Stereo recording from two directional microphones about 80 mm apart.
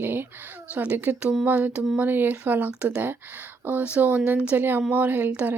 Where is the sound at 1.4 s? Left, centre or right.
Centre.